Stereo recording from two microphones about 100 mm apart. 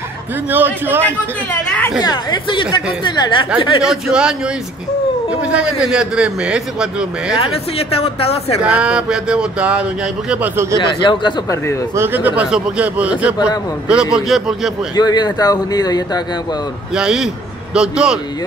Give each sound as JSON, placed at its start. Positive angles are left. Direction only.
{"t": 0.5, "sound": "a man's voice", "side_deg": -20}
{"t": 2.0, "sound": "speech", "side_deg": 50}
{"t": 3.8, "sound": "a man's voice", "side_deg": -10}
{"t": 5.4, "sound": "a man's voice", "side_deg": -10}
{"t": 7.3, "sound": "a woman's voice", "side_deg": 70}
{"t": 8.6, "sound": "a man's voice", "side_deg": -10}
{"t": 10.5, "sound": "a man's voice", "side_deg": -25}
{"t": 10.8, "sound": "speech", "side_deg": 50}
{"t": 11.9, "sound": "a man's voice", "side_deg": -20}
{"t": 15.0, "sound": "speech", "side_deg": 45}
{"t": 16.9, "sound": "a man's voice", "side_deg": -5}